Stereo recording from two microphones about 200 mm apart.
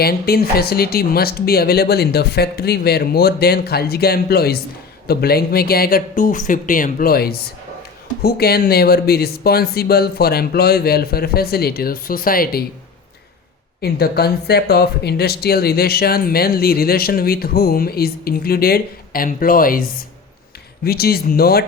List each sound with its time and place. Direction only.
0.0 s speech: 50° left (ahead or behind)
13.8 s speech: 50° left (ahead or behind)
20.8 s speech: 50° left (ahead or behind)